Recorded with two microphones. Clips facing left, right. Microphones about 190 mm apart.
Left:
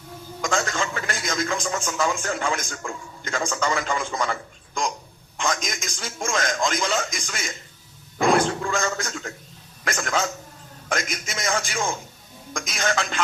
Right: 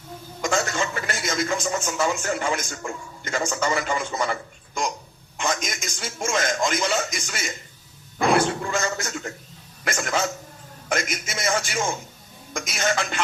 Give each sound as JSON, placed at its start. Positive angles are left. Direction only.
{"t": 0.4, "sound": "a man's voice", "side_deg": -5}
{"t": 8.6, "sound": "a man's voice", "side_deg": -5}